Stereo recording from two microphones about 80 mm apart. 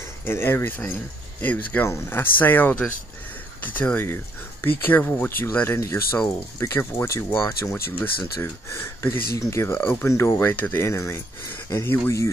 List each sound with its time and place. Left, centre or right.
0.2 s speech: left
1.9 s speech: left
9.8 s speech: left
10.0 s speech: left